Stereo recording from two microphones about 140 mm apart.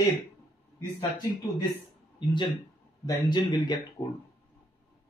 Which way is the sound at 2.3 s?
35° left (ahead or behind).